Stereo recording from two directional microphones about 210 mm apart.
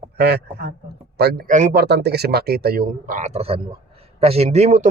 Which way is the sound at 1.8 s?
50° right (ahead or behind).